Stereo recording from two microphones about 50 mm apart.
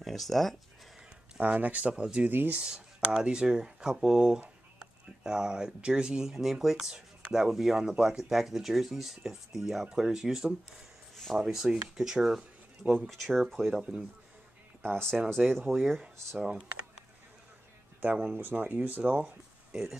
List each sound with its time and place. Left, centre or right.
0.0 s speech: centre
1.4 s speech: right
2.2 s speech: right
2.6 s speech: centre
15.3 s speech: centre
18.1 s speech: centre
18.4 s speech: right
19.7 s speech: centre